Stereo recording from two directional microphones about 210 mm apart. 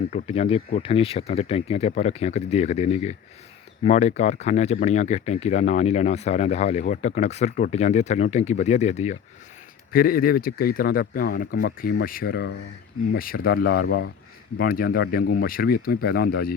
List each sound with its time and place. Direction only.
0.1 s speech: 30° left (ahead or behind)
9.9 s speech: 45° left (ahead or behind)